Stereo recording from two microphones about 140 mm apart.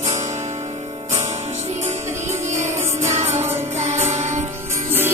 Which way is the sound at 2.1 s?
20° right (ahead or behind).